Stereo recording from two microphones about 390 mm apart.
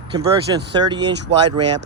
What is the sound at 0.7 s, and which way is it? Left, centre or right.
Speech, centre.